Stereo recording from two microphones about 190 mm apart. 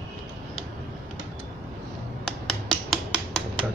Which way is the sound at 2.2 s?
Centre (ahead or behind).